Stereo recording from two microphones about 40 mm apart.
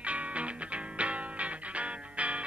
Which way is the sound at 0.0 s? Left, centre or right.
Right.